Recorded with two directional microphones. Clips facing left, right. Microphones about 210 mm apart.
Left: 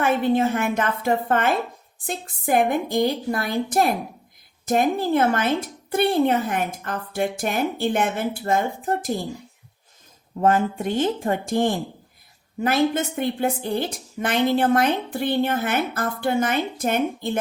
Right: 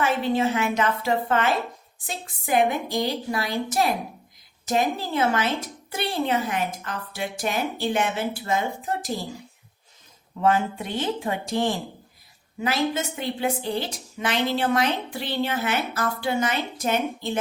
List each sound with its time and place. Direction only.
0.0 s a woman's voice: 55° left (ahead or behind)
10.4 s a woman's voice: 45° left (ahead or behind)